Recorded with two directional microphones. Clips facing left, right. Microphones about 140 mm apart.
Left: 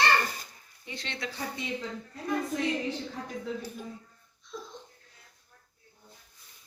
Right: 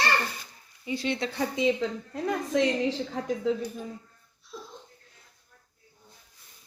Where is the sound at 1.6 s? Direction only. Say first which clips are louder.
Right 10 dB; 90° right.